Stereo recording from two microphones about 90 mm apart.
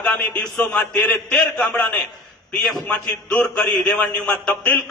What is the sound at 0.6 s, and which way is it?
A man's voice, 20° left (ahead or behind).